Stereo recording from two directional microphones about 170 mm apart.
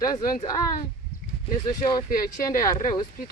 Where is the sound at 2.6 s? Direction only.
20° left (ahead or behind).